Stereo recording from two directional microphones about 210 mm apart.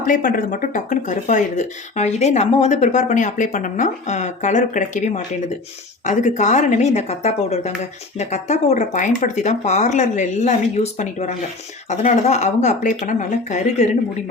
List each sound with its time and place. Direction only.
0.0 s speech: 40° left (ahead or behind)